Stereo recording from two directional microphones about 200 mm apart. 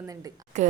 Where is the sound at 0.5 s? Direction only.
35° right (ahead or behind).